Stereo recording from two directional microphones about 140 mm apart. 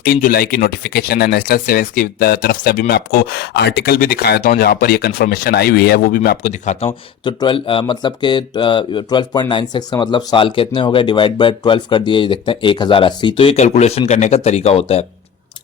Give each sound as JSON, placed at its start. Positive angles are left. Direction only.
{"t": 0.1, "sound": "speech", "side_deg": 85}
{"t": 6.5, "sound": "speech", "side_deg": 50}